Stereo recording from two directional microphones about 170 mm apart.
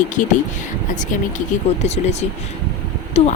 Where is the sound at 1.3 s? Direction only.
40° left (ahead or behind).